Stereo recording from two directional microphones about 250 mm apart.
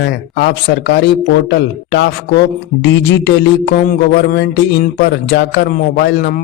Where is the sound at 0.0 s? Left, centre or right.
Left.